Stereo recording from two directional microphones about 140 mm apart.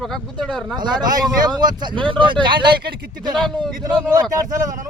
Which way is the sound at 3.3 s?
Centre (ahead or behind).